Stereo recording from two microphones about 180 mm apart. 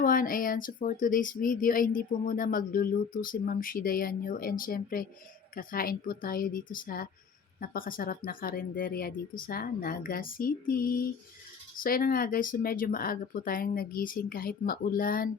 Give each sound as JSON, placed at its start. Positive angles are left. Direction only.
{"t": 0.0, "sound": "speech", "side_deg": 50}